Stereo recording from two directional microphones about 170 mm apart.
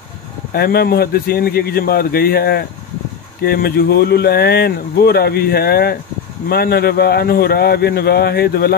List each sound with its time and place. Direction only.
0.5 s speech: 65° left (ahead or behind)